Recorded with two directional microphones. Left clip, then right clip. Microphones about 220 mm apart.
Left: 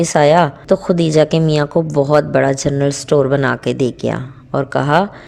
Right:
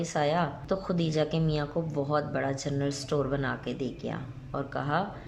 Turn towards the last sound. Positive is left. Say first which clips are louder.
# left 16 dB
turn(degrees=45)  # may be behind; listen again after turning